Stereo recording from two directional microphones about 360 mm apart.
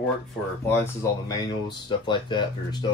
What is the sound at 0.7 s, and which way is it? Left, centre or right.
Speech, centre.